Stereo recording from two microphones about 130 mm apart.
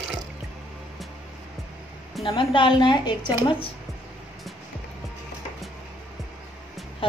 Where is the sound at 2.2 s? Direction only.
40° left (ahead or behind).